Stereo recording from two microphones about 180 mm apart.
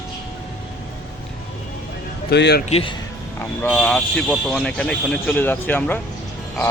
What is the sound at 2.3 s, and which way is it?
Speech, 65° left (ahead or behind).